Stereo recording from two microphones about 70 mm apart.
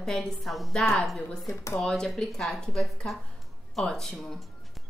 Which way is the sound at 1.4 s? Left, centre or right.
Left.